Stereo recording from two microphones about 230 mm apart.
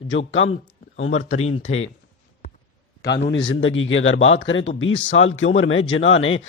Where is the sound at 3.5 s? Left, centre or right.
Left.